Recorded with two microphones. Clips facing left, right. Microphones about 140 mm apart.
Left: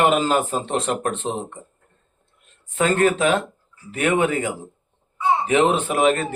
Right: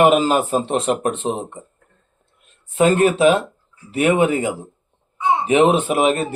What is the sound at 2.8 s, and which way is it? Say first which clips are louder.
Speech: right 4 dB; 20° right (ahead or behind).